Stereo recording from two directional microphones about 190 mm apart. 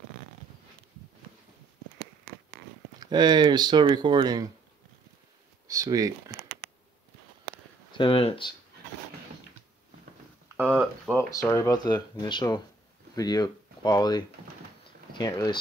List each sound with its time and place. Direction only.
3.0 s speech: 20° right (ahead or behind)
5.7 s speech: 15° right (ahead or behind)
8.0 s speech: 30° left (ahead or behind)
10.7 s speech: centre (ahead or behind)
11.1 s speech: 15° left (ahead or behind)